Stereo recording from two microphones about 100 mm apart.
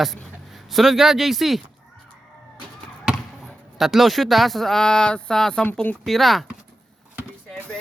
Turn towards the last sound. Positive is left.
turn(degrees=0)  # may be behind; listen again after turning